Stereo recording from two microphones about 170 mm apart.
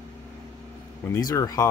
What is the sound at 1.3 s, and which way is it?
Speech, 20° left (ahead or behind).